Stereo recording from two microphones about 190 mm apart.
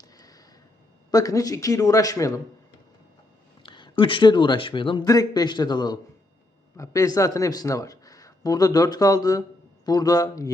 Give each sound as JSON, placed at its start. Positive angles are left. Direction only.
{"t": 0.2, "sound": "a sound", "side_deg": 20}
{"t": 1.1, "sound": "speech", "side_deg": 20}
{"t": 3.6, "sound": "speech", "side_deg": 25}